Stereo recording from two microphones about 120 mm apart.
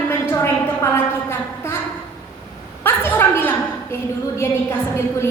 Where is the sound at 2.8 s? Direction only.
20° left (ahead or behind).